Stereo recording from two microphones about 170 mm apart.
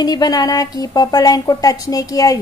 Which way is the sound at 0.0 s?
25° left (ahead or behind).